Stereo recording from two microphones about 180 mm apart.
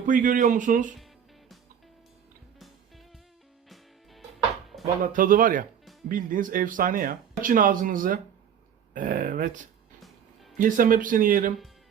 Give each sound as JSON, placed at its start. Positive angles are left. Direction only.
{"t": 0.0, "sound": "speech", "side_deg": -45}
{"t": 5.1, "sound": "speech", "side_deg": -50}
{"t": 10.6, "sound": "speech", "side_deg": -50}